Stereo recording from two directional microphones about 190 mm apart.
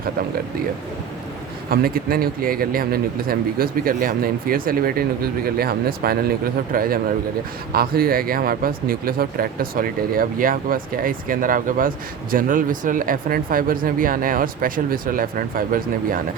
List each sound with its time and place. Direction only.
1.7 s speech: 50° right (ahead or behind)